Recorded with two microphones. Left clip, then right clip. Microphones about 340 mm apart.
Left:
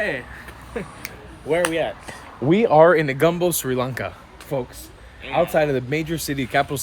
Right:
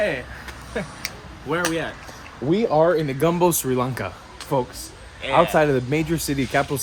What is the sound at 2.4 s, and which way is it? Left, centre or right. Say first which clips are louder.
Speech: left 4 dB; left.